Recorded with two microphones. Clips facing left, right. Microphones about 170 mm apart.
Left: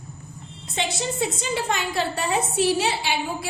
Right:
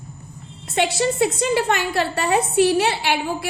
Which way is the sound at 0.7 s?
70° right (ahead or behind).